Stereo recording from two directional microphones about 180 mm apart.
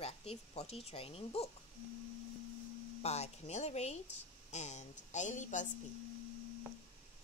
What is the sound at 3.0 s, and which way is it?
Speech, 35° left (ahead or behind).